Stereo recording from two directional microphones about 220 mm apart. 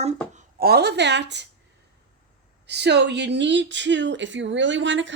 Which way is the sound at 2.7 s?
50° right (ahead or behind).